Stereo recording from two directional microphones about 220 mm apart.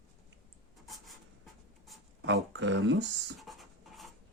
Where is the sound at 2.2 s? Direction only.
55° right (ahead or behind).